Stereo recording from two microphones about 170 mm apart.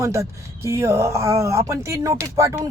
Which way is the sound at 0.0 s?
15° right (ahead or behind).